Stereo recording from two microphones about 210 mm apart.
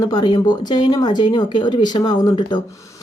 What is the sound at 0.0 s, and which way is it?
A woman's voice, 20° left (ahead or behind).